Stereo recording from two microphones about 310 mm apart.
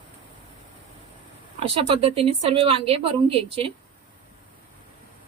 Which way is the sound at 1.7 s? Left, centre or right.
Centre.